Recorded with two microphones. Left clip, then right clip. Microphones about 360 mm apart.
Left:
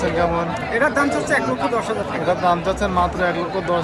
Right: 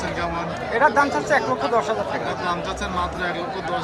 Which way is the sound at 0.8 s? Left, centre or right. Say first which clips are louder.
Right 1 dB; right.